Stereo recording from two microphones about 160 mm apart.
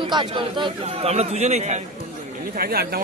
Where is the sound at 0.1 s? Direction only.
30° right (ahead or behind).